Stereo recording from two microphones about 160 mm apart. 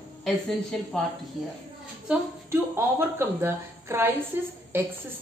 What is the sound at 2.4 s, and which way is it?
A woman's voice, 15° right (ahead or behind).